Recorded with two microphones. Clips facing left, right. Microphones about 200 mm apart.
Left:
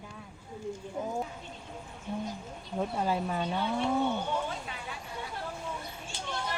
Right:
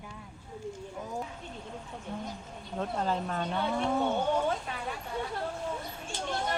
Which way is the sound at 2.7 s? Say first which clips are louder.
Left 1 dB; 10° left (ahead or behind).